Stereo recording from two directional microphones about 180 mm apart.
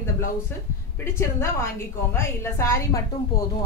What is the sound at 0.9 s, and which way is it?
A woman's voice, 15° left (ahead or behind).